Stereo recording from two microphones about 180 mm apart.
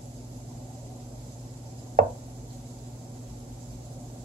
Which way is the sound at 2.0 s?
50° right (ahead or behind).